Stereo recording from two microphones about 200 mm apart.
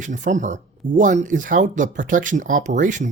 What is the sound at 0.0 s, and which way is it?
Speech, 40° right (ahead or behind).